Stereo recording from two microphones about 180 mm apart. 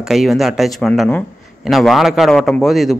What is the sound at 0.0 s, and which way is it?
A man's voice, centre (ahead or behind).